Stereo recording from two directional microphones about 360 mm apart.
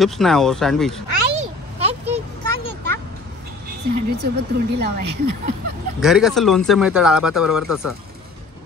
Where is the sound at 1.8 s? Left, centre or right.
Centre.